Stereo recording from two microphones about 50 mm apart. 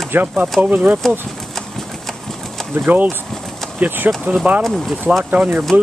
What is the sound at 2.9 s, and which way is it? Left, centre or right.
Speech, right.